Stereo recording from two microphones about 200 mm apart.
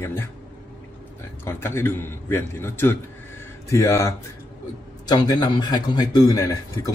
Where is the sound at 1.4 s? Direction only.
10° left (ahead or behind).